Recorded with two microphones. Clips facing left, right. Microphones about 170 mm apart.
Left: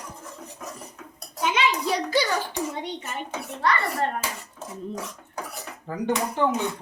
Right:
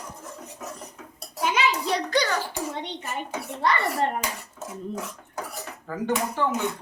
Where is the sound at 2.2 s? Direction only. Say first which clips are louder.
Left 1 dB; 15° left (ahead or behind).